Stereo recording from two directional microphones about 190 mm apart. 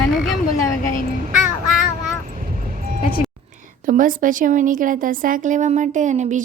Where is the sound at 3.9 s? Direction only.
45° right (ahead or behind).